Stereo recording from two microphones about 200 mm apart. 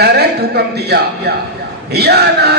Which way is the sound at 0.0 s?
55° right (ahead or behind).